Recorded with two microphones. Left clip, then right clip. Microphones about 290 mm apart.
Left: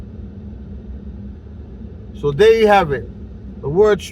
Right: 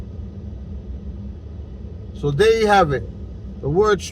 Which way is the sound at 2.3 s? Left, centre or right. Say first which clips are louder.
Left 3 dB; centre.